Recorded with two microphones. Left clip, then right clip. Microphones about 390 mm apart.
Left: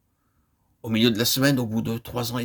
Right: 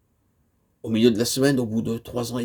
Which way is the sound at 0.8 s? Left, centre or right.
Left.